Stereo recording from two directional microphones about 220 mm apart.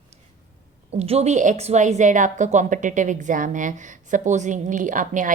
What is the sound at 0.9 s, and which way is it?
A woman's voice, 30° right (ahead or behind).